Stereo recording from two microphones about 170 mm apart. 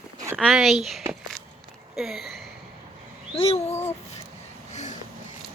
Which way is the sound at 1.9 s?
Centre (ahead or behind).